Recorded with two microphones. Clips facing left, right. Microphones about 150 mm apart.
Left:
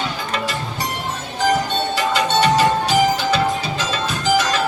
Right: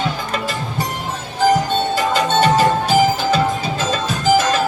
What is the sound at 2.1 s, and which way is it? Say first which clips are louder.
Music: right 1 dB; 45° right (ahead or behind).